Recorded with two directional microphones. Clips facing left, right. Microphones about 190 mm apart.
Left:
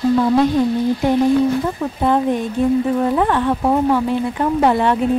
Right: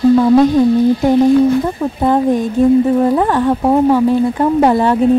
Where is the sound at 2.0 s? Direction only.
40° right (ahead or behind).